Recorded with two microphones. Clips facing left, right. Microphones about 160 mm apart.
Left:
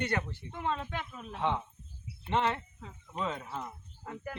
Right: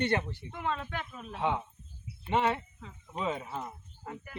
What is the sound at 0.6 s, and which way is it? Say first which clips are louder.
Speech: even; 25° left (ahead or behind).